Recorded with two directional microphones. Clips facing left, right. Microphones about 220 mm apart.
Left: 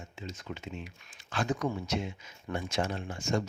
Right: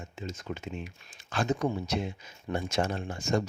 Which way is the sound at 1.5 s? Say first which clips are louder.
Right 3 dB; 25° right (ahead or behind).